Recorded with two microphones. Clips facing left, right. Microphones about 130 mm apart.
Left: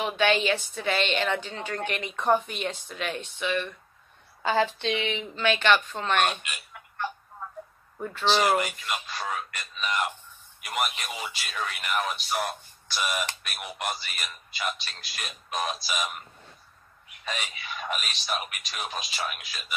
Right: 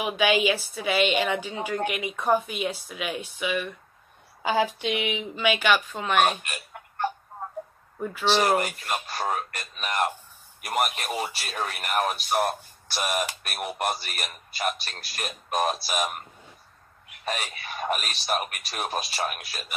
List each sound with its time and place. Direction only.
0.0 s a woman's voice: 10° right (ahead or behind)
6.4 s telephone: 45° right (ahead or behind)
8.0 s a woman's voice: 10° right (ahead or behind)
8.5 s speech: 45° right (ahead or behind)